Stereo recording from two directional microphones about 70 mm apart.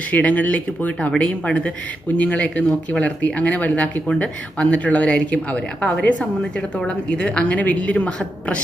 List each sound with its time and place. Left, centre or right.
0.1 s speech: left